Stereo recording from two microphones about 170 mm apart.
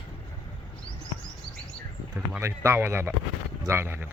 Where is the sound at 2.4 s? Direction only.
15° right (ahead or behind).